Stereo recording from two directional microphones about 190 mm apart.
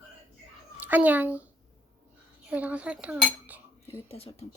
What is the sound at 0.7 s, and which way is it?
Speech, 10° right (ahead or behind).